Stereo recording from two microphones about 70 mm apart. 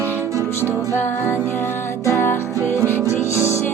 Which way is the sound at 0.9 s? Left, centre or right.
Left.